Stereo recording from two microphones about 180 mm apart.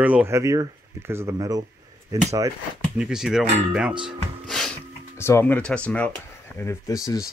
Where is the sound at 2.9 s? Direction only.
5° right (ahead or behind).